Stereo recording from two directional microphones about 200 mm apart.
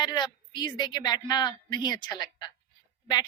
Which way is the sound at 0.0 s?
20° left (ahead or behind).